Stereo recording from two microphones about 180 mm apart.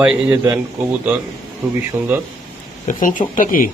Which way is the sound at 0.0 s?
5° right (ahead or behind).